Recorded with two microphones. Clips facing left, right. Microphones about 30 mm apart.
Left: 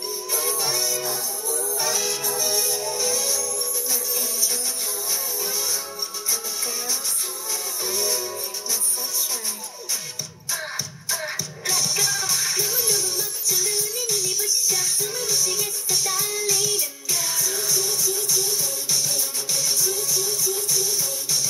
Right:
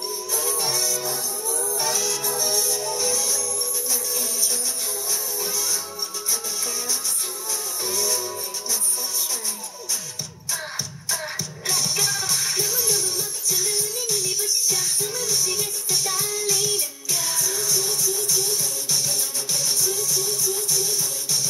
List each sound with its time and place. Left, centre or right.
0.3 s music: centre
0.7 s music: left
1.0 s music: centre
5.1 s music: centre
7.8 s music: centre
11.1 s music: centre
16.5 s music: centre